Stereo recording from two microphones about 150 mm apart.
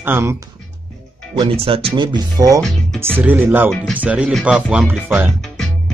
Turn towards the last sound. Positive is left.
turn(degrees=-10)  # may be behind; listen again after turning